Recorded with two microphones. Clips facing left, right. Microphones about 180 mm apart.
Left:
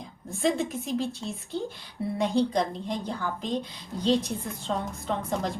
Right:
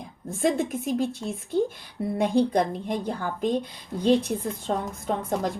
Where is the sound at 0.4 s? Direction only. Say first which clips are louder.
Right 2 dB; 55° right (ahead or behind).